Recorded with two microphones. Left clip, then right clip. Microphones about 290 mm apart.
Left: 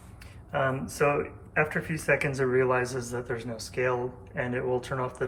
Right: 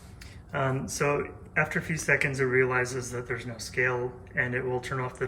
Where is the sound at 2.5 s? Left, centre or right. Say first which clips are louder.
Even; left.